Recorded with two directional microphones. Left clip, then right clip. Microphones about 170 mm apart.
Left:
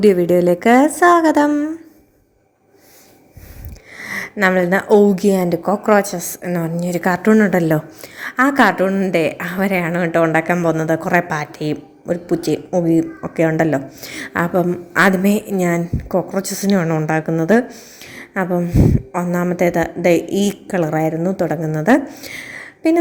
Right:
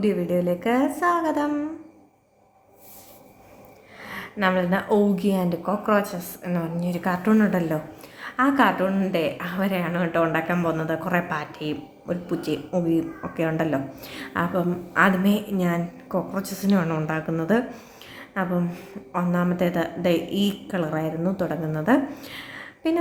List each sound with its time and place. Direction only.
0.0 s a woman's voice: 55° left (ahead or behind)
3.9 s a woman's voice: 50° left (ahead or behind)
12.7 s speech: 25° left (ahead or behind)
13.3 s a woman's voice: 35° left (ahead or behind)
18.0 s a sound: 40° left (ahead or behind)
18.5 s a woman's voice: 25° left (ahead or behind)